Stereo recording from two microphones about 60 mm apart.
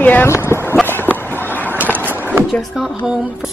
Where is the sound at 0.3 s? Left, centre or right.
Left.